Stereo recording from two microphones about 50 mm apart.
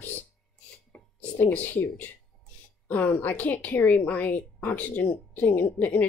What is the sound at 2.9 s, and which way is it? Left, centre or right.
A woman's voice, left.